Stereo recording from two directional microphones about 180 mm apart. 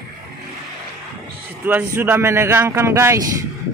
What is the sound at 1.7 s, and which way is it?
A man's voice, 10° right (ahead or behind).